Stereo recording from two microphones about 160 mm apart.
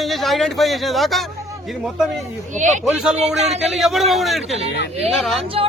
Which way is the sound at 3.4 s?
40° right (ahead or behind).